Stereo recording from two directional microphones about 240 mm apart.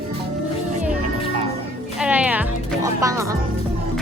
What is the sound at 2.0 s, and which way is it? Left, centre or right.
Speech, centre.